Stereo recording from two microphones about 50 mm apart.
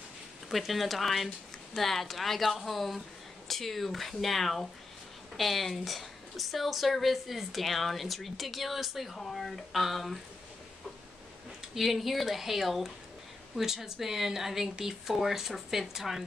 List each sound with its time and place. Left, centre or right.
0.5 s a woman's voice: centre
11.7 s a woman's voice: centre